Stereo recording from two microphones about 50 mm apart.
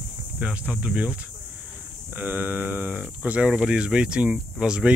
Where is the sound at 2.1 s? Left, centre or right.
Right.